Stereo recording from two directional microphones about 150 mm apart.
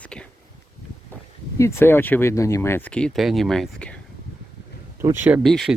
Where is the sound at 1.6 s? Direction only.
15° left (ahead or behind).